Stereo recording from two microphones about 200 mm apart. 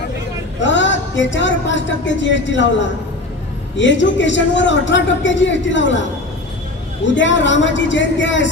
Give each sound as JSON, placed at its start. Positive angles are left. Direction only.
{"t": 0.6, "sound": "a woman's voice", "side_deg": 65}
{"t": 3.7, "sound": "a man's voice", "side_deg": 65}
{"t": 7.2, "sound": "a man's voice", "side_deg": 65}